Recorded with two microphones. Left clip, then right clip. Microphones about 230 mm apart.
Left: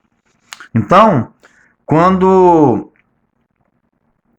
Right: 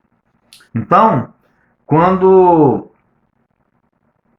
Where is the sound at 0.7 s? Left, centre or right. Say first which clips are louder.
Left 2 dB; left.